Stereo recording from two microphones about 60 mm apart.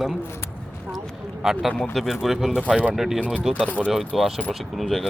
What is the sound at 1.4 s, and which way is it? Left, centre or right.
Speech, centre.